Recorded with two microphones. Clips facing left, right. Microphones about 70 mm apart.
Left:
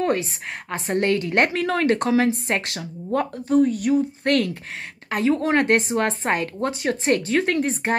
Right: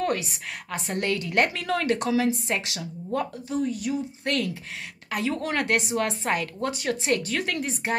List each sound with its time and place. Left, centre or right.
0.0 s a woman's voice: left
5.1 s a woman's voice: left